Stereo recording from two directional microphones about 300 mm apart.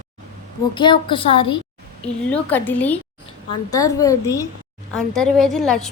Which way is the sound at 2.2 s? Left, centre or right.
Centre.